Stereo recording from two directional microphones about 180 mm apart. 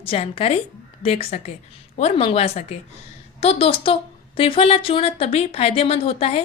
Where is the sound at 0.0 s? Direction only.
30° left (ahead or behind).